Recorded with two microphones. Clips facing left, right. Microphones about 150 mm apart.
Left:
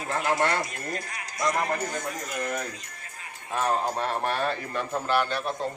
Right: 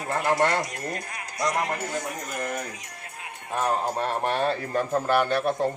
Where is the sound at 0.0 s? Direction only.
55° right (ahead or behind).